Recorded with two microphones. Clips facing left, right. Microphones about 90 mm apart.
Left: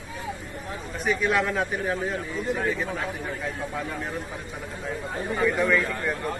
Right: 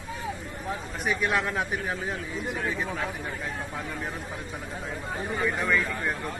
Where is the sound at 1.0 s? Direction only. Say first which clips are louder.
Left 3 dB; centre (ahead or behind).